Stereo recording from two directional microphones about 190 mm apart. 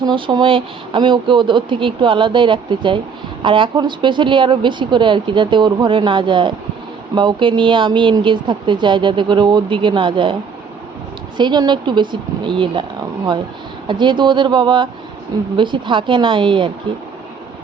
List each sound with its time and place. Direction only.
0.0 s speech: 25° right (ahead or behind)
11.3 s speech: 25° right (ahead or behind)
13.8 s speech: 25° right (ahead or behind)